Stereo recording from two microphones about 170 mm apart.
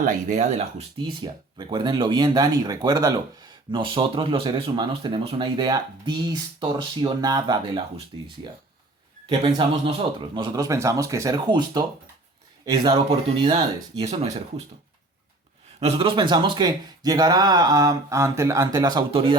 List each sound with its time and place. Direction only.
0.0 s speech: 40° right (ahead or behind)
9.4 s speech: 30° right (ahead or behind)
14.1 s speech: 40° right (ahead or behind)
15.8 s speech: 30° right (ahead or behind)